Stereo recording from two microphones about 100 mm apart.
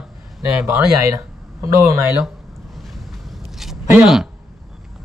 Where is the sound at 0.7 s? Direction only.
30° right (ahead or behind).